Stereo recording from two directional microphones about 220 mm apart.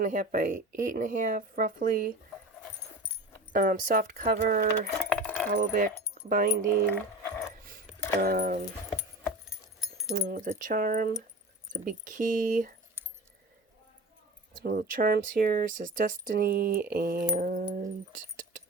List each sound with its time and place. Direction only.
0.0 s speech: 35° right (ahead or behind)
3.5 s speech: 40° right (ahead or behind)
5.1 s keys jangling: 5° left (ahead or behind)
5.5 s speech: 40° right (ahead or behind)
7.2 s a sound: 10° left (ahead or behind)
8.2 s speech: 40° right (ahead or behind)
10.1 s speech: 40° right (ahead or behind)
14.5 s speech: 40° right (ahead or behind)